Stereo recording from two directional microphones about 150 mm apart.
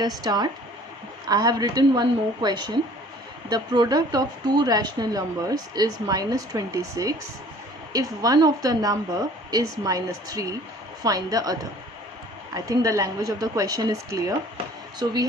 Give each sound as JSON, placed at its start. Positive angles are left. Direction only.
{"t": 0.0, "sound": "speech", "side_deg": -25}